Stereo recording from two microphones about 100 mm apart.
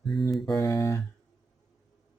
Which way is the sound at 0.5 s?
30° left (ahead or behind).